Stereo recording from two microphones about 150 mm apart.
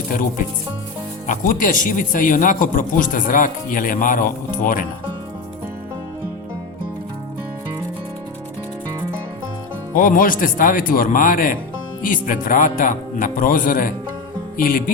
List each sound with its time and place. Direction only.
1.3 s speech: 65° left (ahead or behind)
9.9 s speech: 65° left (ahead or behind)
14.6 s music: 70° left (ahead or behind)